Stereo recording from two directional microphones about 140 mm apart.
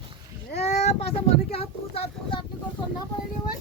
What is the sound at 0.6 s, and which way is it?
Speech, 55° left (ahead or behind).